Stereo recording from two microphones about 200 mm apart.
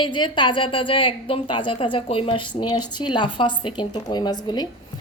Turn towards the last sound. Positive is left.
turn(degrees=20)  # may be behind; listen again after turning